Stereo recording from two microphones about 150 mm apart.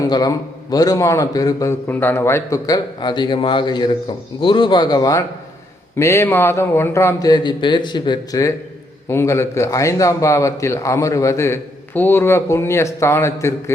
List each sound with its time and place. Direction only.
0.1 s a man's voice: 25° left (ahead or behind)